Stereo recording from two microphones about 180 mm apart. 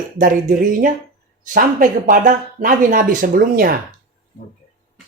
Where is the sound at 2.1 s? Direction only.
45° right (ahead or behind).